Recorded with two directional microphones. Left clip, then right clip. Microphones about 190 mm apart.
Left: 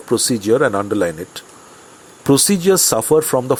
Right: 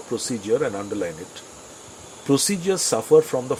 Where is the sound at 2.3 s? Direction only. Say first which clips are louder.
Left 8 dB; 35° left (ahead or behind).